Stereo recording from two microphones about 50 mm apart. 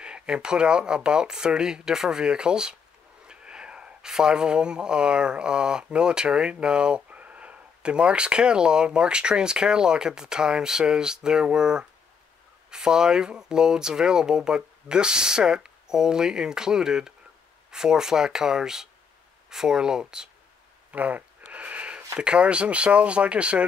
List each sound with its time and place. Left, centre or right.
0.0 s speech: centre
20.9 s a sound: right
22.2 s speech: right